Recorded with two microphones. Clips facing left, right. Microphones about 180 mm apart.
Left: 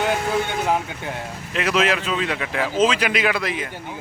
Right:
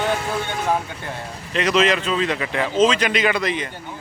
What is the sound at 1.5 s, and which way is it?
Speech, 5° left (ahead or behind).